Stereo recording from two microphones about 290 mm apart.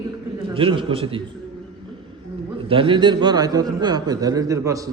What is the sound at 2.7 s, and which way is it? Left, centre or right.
A man's voice, centre.